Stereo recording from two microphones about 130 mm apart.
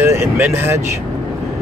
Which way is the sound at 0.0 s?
20° right (ahead or behind).